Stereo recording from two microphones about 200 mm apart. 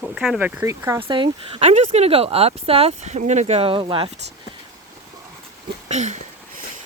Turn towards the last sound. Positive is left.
turn(degrees=-35)  # may be behind; listen again after turning